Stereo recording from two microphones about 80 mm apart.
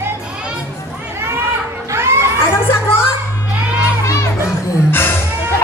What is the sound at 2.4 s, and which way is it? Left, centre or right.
Children playing, left.